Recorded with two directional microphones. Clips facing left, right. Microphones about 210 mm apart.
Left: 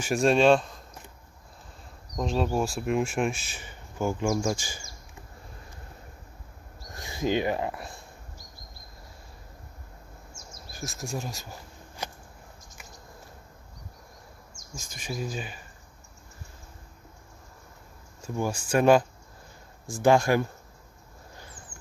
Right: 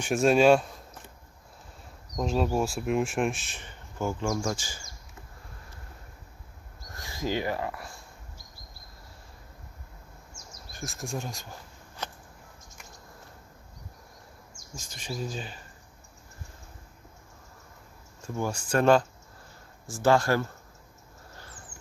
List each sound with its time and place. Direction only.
0.0 s speech: centre (ahead or behind)
2.1 s speech: 5° right (ahead or behind); by 4.8 s 15° left (ahead or behind)
7.0 s speech: 20° left (ahead or behind)
10.7 s speech: centre (ahead or behind)
12.0 s a sound: 10° left (ahead or behind)
14.9 s speech: 10° left (ahead or behind)
18.3 s speech: 10° left (ahead or behind)